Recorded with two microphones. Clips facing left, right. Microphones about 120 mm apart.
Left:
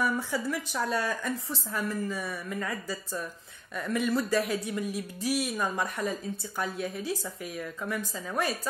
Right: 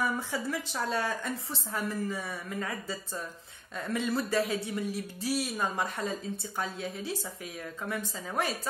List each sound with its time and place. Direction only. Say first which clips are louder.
0.0 s a woman's voice: left 2 dB; 25° right (ahead or behind)